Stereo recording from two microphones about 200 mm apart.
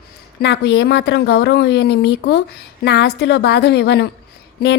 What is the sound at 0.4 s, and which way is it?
Speech, 55° left (ahead or behind).